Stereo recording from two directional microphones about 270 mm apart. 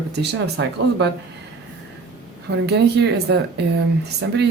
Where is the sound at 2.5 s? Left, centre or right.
Right.